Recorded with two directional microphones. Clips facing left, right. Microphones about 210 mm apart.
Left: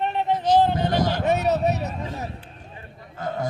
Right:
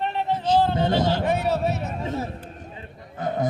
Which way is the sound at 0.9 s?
25° right (ahead or behind).